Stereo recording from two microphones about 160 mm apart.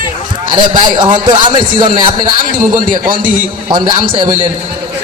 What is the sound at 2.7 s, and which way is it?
Speech, 60° right (ahead or behind).